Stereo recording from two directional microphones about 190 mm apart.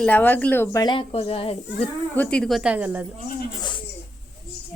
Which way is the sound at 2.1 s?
5° left (ahead or behind).